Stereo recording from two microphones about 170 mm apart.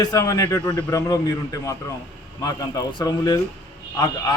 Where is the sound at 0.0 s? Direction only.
20° left (ahead or behind).